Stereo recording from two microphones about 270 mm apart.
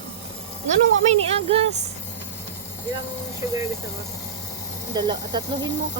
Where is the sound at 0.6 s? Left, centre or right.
Right.